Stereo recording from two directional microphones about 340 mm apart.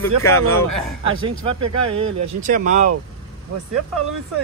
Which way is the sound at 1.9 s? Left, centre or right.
Centre.